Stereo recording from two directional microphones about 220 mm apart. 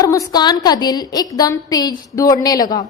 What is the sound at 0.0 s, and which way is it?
A woman's voice, 15° left (ahead or behind).